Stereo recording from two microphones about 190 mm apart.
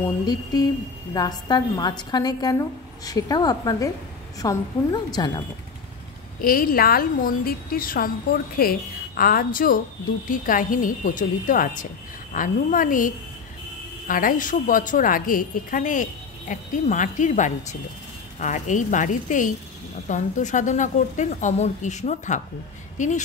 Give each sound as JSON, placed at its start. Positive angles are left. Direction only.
{"t": 0.3, "sound": "a woman's voice", "side_deg": 20}
{"t": 6.4, "sound": "a woman's voice", "side_deg": 50}